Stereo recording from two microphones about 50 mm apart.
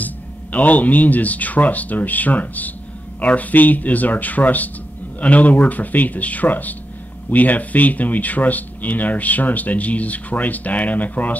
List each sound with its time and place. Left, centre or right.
0.0 s speech: left